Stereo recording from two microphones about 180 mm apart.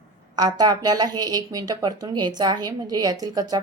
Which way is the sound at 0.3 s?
20° right (ahead or behind).